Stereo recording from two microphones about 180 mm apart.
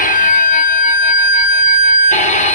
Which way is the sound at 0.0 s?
50° left (ahead or behind).